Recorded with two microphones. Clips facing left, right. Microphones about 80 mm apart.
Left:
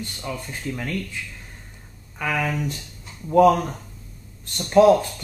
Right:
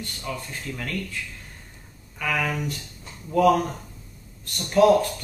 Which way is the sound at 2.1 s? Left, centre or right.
Centre.